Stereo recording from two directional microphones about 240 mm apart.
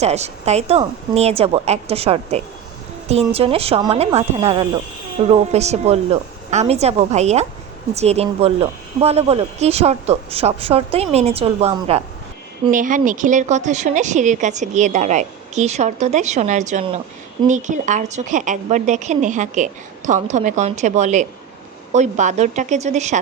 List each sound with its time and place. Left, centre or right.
0.0 s a woman's voice: right